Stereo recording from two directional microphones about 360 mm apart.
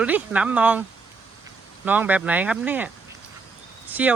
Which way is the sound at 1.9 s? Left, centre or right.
Centre.